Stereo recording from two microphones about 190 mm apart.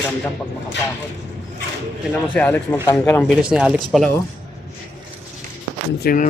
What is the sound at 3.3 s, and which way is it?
Speech, 5° right (ahead or behind).